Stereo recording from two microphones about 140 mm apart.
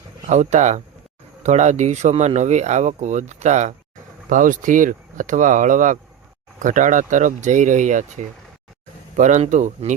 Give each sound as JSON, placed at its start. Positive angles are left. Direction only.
{"t": 0.3, "sound": "speech", "side_deg": -55}
{"t": 4.3, "sound": "speech", "side_deg": -70}